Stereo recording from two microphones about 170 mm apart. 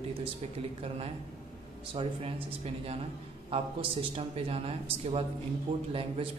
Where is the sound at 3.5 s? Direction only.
30° right (ahead or behind).